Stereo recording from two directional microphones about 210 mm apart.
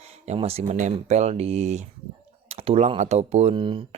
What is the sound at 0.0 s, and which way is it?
Speech, 30° right (ahead or behind).